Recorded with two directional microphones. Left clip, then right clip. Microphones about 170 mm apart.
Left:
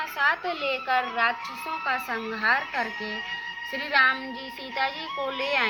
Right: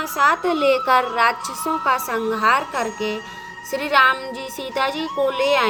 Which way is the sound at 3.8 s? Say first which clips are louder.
Right 6 dB; 55° right (ahead or behind).